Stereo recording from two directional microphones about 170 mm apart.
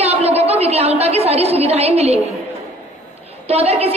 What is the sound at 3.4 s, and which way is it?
Speech, 35° right (ahead or behind).